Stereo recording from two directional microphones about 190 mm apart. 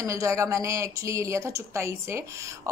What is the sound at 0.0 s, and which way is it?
A woman's voice, 15° right (ahead or behind).